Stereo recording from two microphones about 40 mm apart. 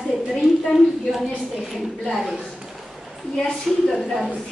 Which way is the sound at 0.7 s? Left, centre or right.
Centre.